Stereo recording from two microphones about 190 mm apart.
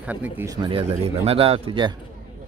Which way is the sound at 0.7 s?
30° right (ahead or behind).